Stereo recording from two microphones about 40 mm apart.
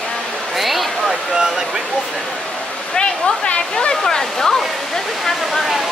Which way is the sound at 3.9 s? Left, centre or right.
Centre.